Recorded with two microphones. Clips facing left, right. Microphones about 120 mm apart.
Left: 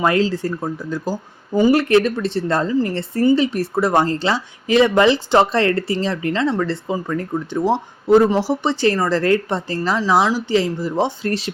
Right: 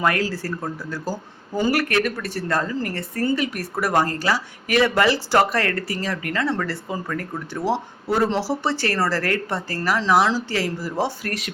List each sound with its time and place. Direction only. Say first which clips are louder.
0.0 s speech: left 5 dB; 25° left (ahead or behind)